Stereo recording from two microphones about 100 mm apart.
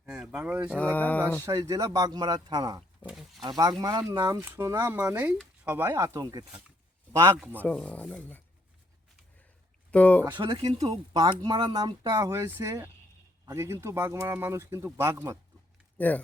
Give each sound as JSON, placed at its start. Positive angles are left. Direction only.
{"t": 0.2, "sound": "speech", "side_deg": -15}
{"t": 0.8, "sound": "speech", "side_deg": 15}
{"t": 1.4, "sound": "speech", "side_deg": -30}
{"t": 3.1, "sound": "speech", "side_deg": -5}
{"t": 3.4, "sound": "speech", "side_deg": -40}
{"t": 4.4, "sound": "a man's voice", "side_deg": -25}
{"t": 7.8, "sound": "speech", "side_deg": 15}
{"t": 9.9, "sound": "speech", "side_deg": 15}
{"t": 10.3, "sound": "speech", "side_deg": -55}
{"t": 16.0, "sound": "speech", "side_deg": 15}